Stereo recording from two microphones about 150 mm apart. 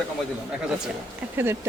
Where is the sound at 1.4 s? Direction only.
15° right (ahead or behind).